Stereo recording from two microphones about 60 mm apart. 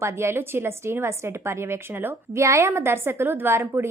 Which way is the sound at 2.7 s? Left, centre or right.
Right.